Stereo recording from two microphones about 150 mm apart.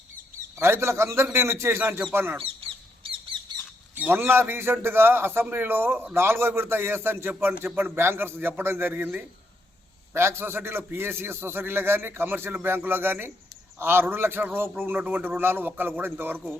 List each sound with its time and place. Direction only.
0.6 s a man's voice: 15° right (ahead or behind)
2.4 s bird: 40° right (ahead or behind)
3.9 s a man's voice: 15° right (ahead or behind)